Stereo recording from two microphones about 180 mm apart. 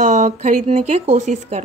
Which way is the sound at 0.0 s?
45° right (ahead or behind).